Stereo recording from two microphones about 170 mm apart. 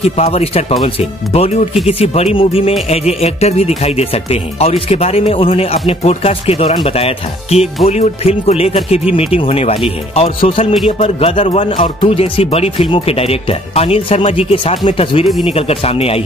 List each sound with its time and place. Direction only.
0.0 s speech: 35° left (ahead or behind)